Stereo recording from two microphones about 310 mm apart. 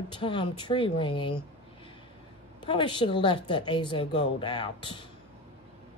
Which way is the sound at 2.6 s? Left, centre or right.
Centre.